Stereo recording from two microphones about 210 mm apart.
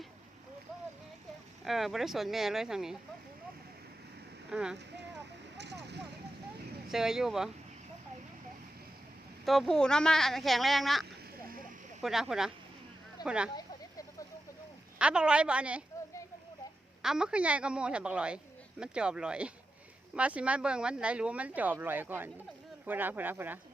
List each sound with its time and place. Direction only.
1.6 s speech: centre (ahead or behind)
4.5 s speech: 5° right (ahead or behind)
5.5 s a sound: 55° right (ahead or behind)
6.9 s speech: centre (ahead or behind)
9.5 s speech: centre (ahead or behind)
12.0 s speech: centre (ahead or behind)
14.9 s speech: 5° right (ahead or behind)
17.0 s speech: 5° right (ahead or behind)